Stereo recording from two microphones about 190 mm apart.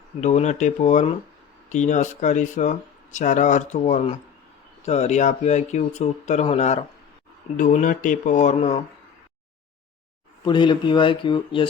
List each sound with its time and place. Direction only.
0.2 s speech: 35° left (ahead or behind)
10.4 s speech: 25° left (ahead or behind)